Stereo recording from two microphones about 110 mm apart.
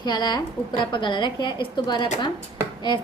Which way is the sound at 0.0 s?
40° left (ahead or behind).